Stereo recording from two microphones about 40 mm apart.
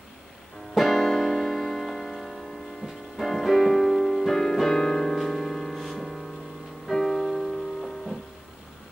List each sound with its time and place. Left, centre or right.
0.7 s music: centre